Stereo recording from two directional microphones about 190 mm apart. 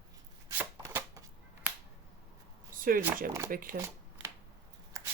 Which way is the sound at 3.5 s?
50° right (ahead or behind).